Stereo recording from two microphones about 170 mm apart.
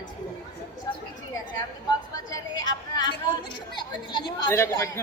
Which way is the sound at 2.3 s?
25° left (ahead or behind).